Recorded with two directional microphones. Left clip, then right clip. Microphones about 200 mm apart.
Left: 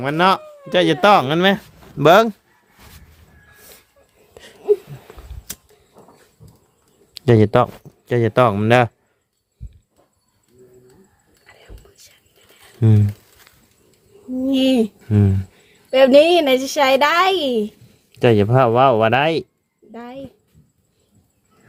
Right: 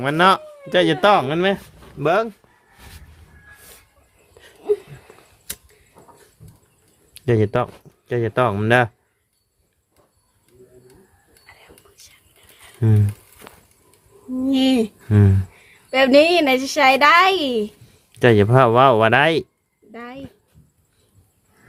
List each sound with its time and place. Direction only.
0.0 s speech: 5° left (ahead or behind); by 2.3 s 35° left (ahead or behind)
4.4 s a sound: 25° left (ahead or behind)
5.5 s a sound: centre (ahead or behind)
7.1 s speech: 25° left (ahead or behind)
11.4 s whispering: 30° left (ahead or behind)
12.8 s speech: 15° left (ahead or behind)
14.4 s a woman's voice: 20° left (ahead or behind)
15.1 s speech: 5° right (ahead or behind)
15.9 s a woman's voice: 20° left (ahead or behind)
18.1 s speech: centre (ahead or behind)
19.9 s a sound: 20° left (ahead or behind)